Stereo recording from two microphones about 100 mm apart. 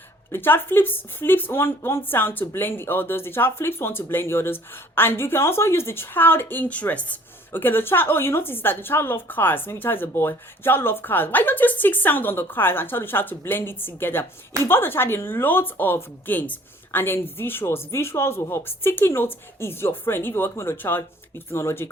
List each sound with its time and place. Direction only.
0.3 s speech: 20° left (ahead or behind)